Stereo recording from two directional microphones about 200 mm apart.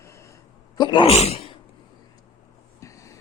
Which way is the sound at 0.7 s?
25° left (ahead or behind).